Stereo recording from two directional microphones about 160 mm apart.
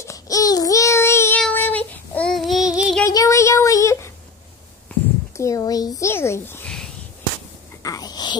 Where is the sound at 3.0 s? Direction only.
20° left (ahead or behind).